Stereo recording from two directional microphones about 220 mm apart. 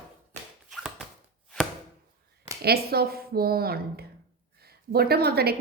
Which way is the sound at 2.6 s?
45° right (ahead or behind).